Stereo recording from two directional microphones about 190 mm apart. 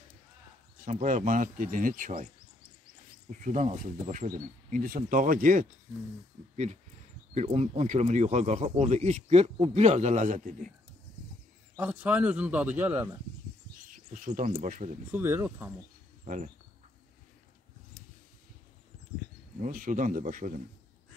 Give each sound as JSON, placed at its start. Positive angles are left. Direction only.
{"t": 0.8, "sound": "speech", "side_deg": -40}
{"t": 3.3, "sound": "speech", "side_deg": -40}
{"t": 11.7, "sound": "speech", "side_deg": -10}
{"t": 13.8, "sound": "speech", "side_deg": -45}
{"t": 15.0, "sound": "speech", "side_deg": -10}
{"t": 19.6, "sound": "speech", "side_deg": -45}